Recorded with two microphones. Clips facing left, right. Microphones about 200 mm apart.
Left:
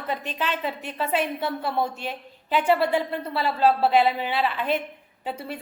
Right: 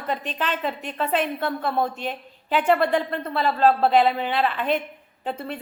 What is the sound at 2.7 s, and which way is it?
Speech, 10° left (ahead or behind).